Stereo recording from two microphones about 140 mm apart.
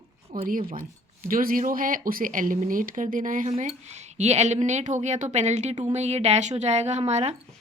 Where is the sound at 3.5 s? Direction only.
50° right (ahead or behind).